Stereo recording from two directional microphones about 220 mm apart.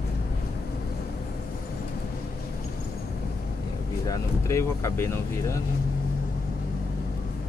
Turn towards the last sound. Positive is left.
turn(degrees=10)  # may be behind; listen again after turning